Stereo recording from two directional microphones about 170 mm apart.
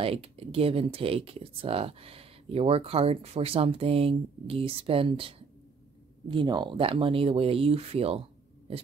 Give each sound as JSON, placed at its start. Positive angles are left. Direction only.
{"t": 0.0, "sound": "speech", "side_deg": -35}